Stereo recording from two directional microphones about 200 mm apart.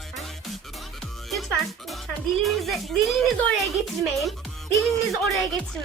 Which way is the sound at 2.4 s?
Centre (ahead or behind).